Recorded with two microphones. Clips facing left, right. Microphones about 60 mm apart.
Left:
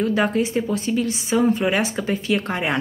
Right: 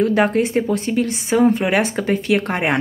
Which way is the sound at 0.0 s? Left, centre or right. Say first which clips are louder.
Right 4 dB; right.